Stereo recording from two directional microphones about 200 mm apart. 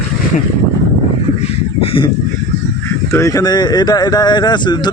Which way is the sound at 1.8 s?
25° left (ahead or behind).